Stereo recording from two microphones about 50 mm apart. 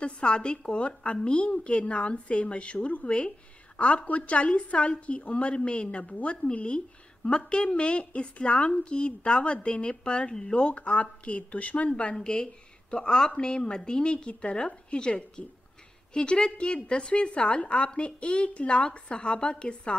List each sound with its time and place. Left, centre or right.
0.0 s a woman's voice: left